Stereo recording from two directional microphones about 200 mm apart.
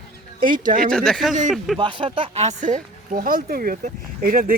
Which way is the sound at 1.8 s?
25° right (ahead or behind).